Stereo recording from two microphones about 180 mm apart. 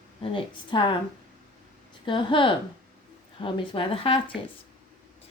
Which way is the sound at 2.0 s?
25° left (ahead or behind).